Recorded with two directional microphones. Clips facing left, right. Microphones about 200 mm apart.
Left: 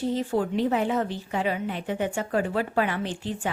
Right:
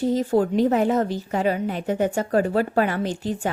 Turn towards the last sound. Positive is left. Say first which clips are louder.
# right 5 dB
turn(degrees=-40)  # may be behind; listen again after turning